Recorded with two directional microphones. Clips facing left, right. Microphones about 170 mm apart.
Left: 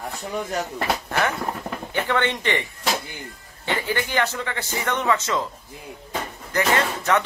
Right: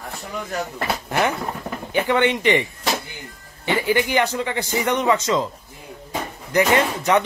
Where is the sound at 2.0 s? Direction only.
15° right (ahead or behind).